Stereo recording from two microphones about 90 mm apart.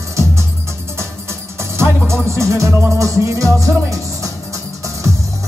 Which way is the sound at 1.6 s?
30° right (ahead or behind).